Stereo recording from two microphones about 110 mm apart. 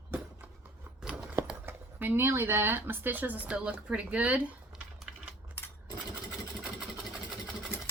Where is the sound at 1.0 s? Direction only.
10° right (ahead or behind).